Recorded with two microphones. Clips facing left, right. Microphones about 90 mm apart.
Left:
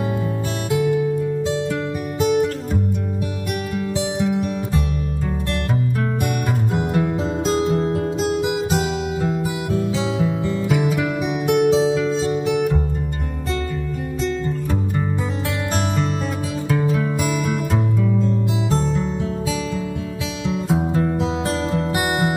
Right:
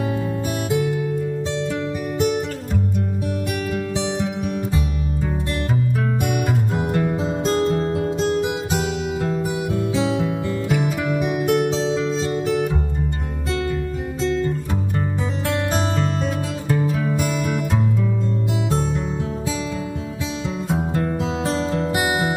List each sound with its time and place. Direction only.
6.7 s music: 5° left (ahead or behind)
7.5 s music: 10° left (ahead or behind)
20.4 s music: centre (ahead or behind)